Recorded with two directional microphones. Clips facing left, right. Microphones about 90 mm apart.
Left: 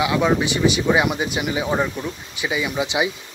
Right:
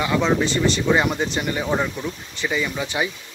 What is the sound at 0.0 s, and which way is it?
Speech, 10° left (ahead or behind).